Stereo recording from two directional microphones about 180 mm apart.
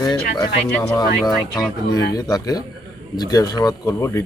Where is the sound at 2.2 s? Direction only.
20° left (ahead or behind).